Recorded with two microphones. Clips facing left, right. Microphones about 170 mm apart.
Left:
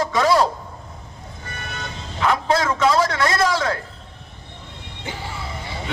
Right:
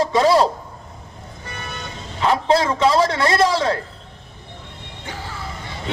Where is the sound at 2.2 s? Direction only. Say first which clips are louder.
Right 2 dB; 30° right (ahead or behind).